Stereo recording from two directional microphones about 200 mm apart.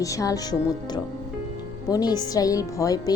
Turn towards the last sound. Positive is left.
turn(degrees=15)  # may be behind; listen again after turning